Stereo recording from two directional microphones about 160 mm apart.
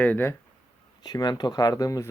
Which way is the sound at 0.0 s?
10° left (ahead or behind).